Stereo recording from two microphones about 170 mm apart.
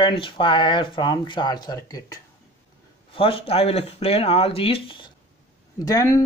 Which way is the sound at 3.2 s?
35° left (ahead or behind).